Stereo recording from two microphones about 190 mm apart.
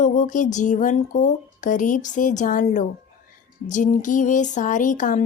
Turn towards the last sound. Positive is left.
turn(degrees=40)  # may be behind; listen again after turning